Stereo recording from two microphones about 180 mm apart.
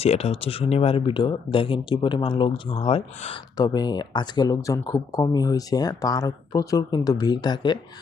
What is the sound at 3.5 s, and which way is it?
Speech, 20° left (ahead or behind).